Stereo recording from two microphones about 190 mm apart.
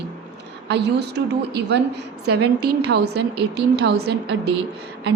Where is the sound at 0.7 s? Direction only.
60° right (ahead or behind).